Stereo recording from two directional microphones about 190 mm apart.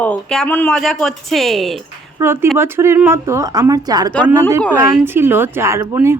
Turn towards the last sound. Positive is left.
turn(degrees=-15)  # may be behind; listen again after turning